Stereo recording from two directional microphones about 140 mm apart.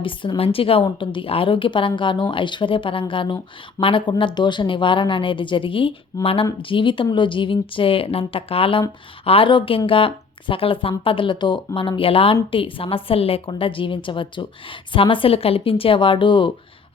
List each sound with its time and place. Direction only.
0.0 s speech: 35° left (ahead or behind)